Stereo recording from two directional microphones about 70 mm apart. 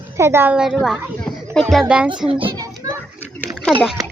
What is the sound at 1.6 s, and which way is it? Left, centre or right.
Speech, centre.